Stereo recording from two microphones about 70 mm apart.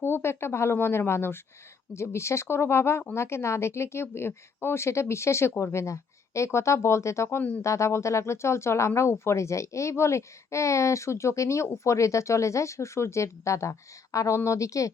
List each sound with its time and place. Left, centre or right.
0.0 s a woman's voice: left